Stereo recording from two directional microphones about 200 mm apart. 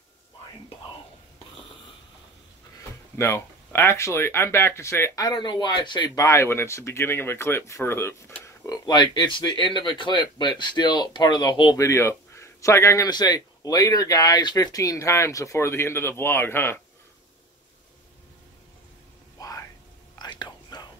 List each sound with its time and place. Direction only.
3.2 s speech: 10° left (ahead or behind)
19.4 s a sound: 20° left (ahead or behind)
20.2 s whispering: 20° left (ahead or behind)